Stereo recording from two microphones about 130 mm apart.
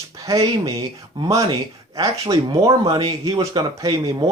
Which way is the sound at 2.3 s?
30° right (ahead or behind).